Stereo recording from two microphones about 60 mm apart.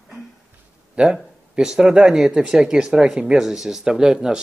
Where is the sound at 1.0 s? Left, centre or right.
Centre.